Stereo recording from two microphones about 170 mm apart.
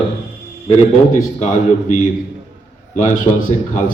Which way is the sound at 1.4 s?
45° left (ahead or behind).